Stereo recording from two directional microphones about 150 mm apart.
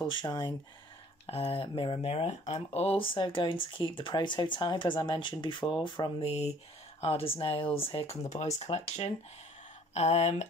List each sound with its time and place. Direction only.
0.0 s speech: 30° left (ahead or behind)
6.2 s speech: 45° left (ahead or behind)